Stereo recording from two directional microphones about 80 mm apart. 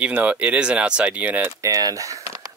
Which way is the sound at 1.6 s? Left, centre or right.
Right.